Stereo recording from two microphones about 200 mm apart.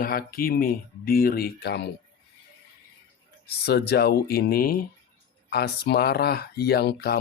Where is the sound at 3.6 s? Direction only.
55° left (ahead or behind).